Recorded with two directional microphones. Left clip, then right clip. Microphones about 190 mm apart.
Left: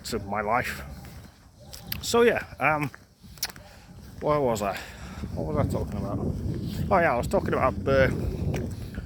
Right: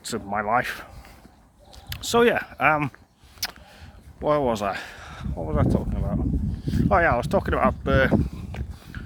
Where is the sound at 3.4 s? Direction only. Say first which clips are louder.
Right 3 dB; 25° right (ahead or behind).